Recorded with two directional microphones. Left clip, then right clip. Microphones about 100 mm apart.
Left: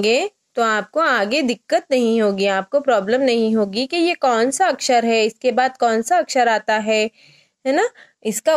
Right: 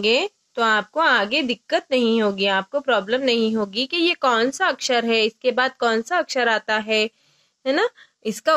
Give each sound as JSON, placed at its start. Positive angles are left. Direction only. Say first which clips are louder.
{"t": 0.0, "sound": "a woman's voice", "louder": "left 2 dB", "side_deg": 35}